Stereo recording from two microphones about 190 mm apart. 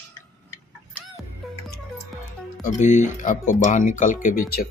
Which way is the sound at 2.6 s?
40° left (ahead or behind).